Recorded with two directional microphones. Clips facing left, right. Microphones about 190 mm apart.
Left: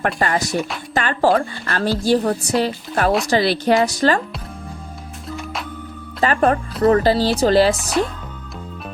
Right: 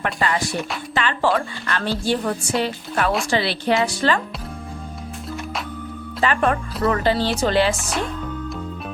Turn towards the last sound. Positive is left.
turn(degrees=0)  # may be behind; listen again after turning